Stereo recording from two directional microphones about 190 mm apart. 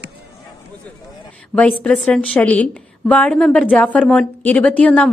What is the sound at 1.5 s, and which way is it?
A woman's voice, 5° left (ahead or behind).